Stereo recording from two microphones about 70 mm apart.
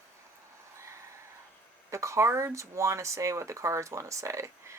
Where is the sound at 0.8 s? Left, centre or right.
Right.